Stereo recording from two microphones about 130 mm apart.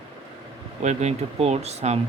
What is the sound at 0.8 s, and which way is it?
Speech, 60° right (ahead or behind).